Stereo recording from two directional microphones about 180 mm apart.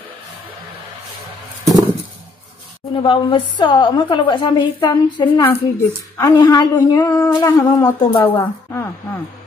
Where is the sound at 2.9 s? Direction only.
25° left (ahead or behind).